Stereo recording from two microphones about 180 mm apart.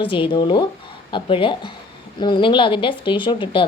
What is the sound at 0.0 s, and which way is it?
Speech, 30° left (ahead or behind).